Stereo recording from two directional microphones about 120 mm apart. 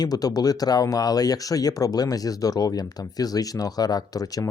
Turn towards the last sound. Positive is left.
turn(degrees=30)  # may be behind; listen again after turning